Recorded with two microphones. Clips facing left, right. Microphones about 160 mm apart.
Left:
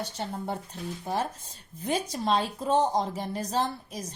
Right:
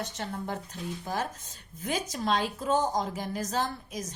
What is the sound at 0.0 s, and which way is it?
A woman's voice, 30° left (ahead or behind).